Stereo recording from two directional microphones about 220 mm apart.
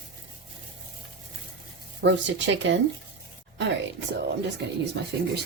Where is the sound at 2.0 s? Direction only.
55° right (ahead or behind).